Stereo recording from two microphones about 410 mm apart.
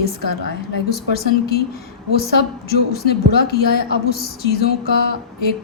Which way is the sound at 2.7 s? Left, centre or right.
Left.